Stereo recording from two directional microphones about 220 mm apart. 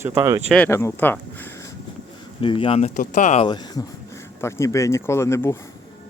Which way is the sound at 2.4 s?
25° left (ahead or behind).